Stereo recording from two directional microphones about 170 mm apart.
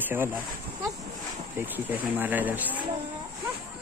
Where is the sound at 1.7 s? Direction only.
10° right (ahead or behind).